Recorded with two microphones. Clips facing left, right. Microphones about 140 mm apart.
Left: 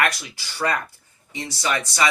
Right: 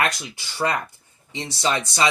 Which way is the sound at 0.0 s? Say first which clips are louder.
Left 1 dB; 20° right (ahead or behind).